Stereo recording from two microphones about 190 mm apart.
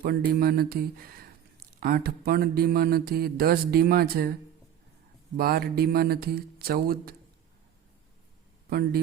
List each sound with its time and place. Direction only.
0.0 s speech: 50° right (ahead or behind)
5.4 s speech: 55° right (ahead or behind)
8.7 s speech: 55° right (ahead or behind)